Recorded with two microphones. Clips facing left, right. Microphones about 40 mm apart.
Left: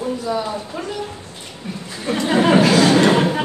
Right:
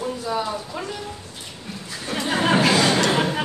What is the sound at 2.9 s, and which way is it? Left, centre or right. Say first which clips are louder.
Chatter: left 6 dB; centre.